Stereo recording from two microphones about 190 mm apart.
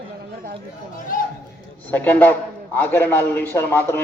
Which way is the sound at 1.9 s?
10° left (ahead or behind).